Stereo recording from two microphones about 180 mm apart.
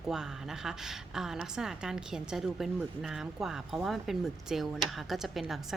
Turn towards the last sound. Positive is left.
turn(degrees=0)  # may be behind; listen again after turning